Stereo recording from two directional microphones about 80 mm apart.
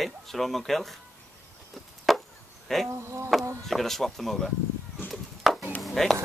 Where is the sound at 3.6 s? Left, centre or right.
Centre.